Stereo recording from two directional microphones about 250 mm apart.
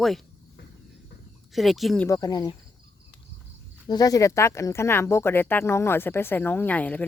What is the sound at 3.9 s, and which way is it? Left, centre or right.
Speech, centre.